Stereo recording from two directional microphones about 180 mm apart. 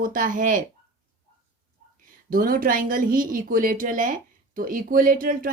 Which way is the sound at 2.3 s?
50° right (ahead or behind).